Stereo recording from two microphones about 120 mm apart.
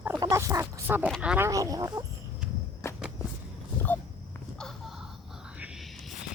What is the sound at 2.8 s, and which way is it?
Walk, 25° left (ahead or behind).